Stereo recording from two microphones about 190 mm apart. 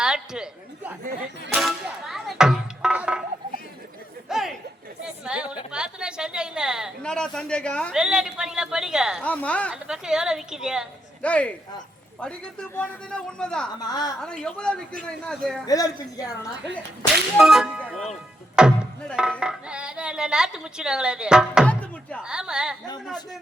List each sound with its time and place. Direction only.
0.0 s a sound: 5° right (ahead or behind)
1.5 s music: centre (ahead or behind)
4.3 s a sound: centre (ahead or behind)
5.0 s chatter: 5° right (ahead or behind)
5.7 s speech: 5° right (ahead or behind)
12.7 s speech: 5° left (ahead or behind)
13.8 s a woman's voice: 20° left (ahead or behind)
14.2 s speech: 5° left (ahead or behind)
15.6 s a woman's voice: 20° left (ahead or behind)
17.3 s speech: centre (ahead or behind)